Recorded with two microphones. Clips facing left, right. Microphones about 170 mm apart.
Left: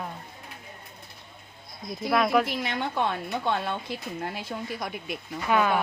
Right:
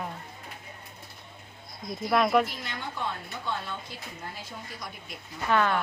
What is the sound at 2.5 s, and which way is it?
A woman's voice, 70° left (ahead or behind).